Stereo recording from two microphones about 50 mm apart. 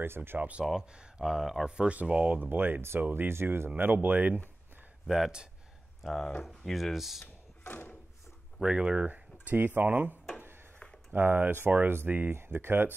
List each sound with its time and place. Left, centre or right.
0.0 s speech: right
0.4 s speech: right
0.7 s speech: centre
1.8 s speech: right
5.0 s speech: centre
6.0 s speech: centre
7.6 s a sound: left
8.5 s speech: centre
9.8 s speech: right